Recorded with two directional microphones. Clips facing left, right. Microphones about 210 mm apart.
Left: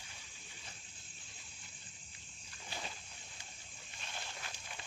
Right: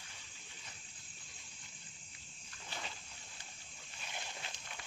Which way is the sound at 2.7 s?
10° left (ahead or behind).